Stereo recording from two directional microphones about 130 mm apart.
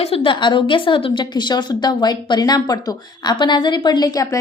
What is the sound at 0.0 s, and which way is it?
Speech, 45° left (ahead or behind).